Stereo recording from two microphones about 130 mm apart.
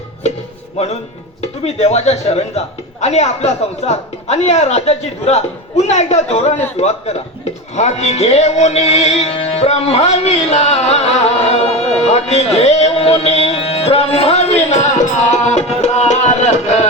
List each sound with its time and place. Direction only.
1.4 s a woman's voice: 55° left (ahead or behind)
12.0 s music: 55° left (ahead or behind)